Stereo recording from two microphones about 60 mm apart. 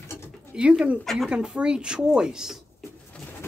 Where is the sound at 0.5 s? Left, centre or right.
Centre.